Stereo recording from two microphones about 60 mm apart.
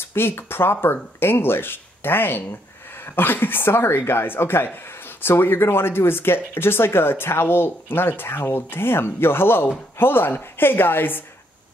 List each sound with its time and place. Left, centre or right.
0.0 s speech: left